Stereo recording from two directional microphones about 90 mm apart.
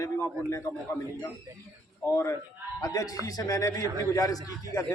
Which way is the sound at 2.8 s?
40° left (ahead or behind).